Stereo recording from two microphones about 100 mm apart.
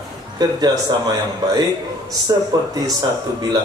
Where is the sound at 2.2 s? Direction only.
40° right (ahead or behind).